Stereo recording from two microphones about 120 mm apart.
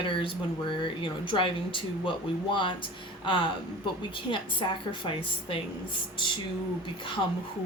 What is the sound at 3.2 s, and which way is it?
A woman's voice, 40° left (ahead or behind).